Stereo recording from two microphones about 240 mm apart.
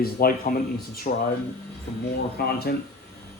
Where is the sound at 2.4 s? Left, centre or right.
Left.